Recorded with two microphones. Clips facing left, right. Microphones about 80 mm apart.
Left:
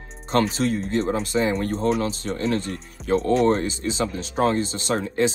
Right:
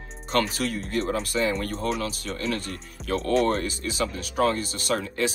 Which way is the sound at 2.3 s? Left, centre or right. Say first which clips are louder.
Left 5 dB; left.